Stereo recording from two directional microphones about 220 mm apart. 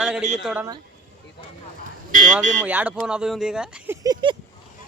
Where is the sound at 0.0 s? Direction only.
5° right (ahead or behind).